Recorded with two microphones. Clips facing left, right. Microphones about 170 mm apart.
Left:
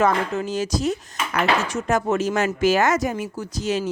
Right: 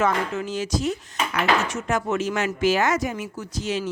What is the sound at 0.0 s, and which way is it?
Speech, 40° left (ahead or behind).